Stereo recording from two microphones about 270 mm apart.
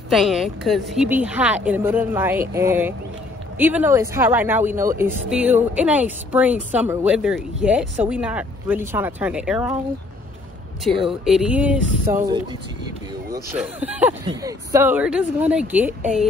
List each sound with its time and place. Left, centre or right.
0.1 s speech: centre
10.8 s speech: centre